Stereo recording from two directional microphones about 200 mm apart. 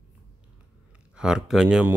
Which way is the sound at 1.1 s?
5° right (ahead or behind).